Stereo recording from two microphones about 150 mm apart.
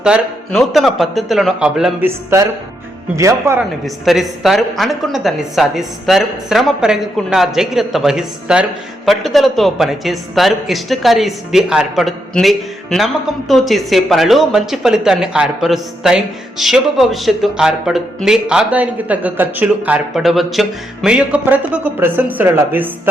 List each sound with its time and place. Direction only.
0.0 s speech: centre (ahead or behind)
2.0 s speech: 20° right (ahead or behind)
3.6 s speech: centre (ahead or behind)